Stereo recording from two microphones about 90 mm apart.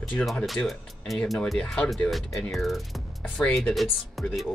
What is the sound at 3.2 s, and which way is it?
Speech, 15° left (ahead or behind).